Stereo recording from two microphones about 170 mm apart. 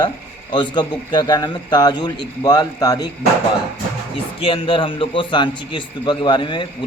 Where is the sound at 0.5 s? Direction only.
25° left (ahead or behind).